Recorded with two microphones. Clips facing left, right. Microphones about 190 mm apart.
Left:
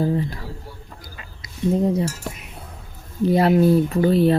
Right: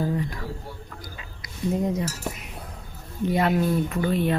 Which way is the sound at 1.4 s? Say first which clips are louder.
Left 5 dB; 30° left (ahead or behind).